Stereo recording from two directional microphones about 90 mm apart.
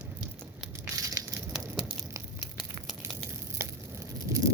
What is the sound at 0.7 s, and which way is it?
Crumpling, 35° right (ahead or behind).